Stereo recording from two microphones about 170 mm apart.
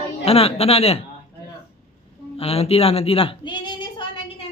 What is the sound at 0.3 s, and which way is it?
Speech, 35° left (ahead or behind).